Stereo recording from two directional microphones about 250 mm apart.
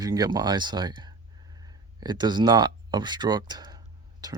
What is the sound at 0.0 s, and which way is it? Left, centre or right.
Speech, centre.